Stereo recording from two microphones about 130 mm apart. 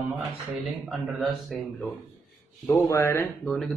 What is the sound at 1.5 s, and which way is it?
Speech, centre (ahead or behind).